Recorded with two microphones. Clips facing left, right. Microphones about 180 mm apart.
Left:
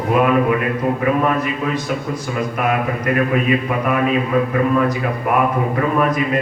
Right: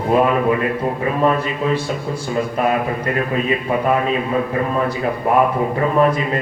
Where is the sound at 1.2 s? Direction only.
30° right (ahead or behind).